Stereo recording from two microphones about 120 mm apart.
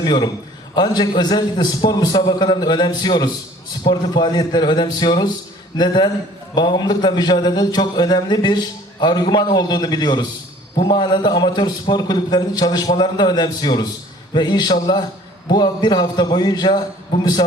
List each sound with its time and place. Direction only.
0.0 s a man's voice: 35° left (ahead or behind)